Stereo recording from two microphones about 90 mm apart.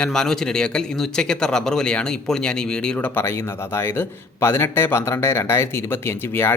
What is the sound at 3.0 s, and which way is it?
A man's voice, 25° left (ahead or behind).